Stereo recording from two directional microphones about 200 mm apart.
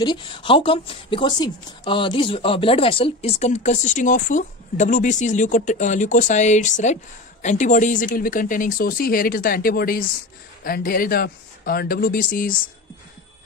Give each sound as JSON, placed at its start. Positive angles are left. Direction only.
{"t": 0.0, "sound": "speech", "side_deg": 25}